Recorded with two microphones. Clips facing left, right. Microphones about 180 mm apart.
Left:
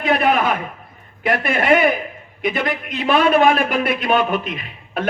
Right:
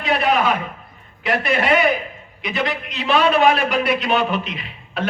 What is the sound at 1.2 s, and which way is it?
A man's voice, 50° left (ahead or behind).